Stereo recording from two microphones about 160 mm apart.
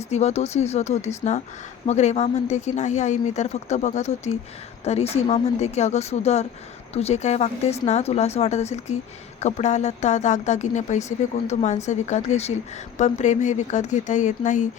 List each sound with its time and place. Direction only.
0.1 s speech: 45° left (ahead or behind)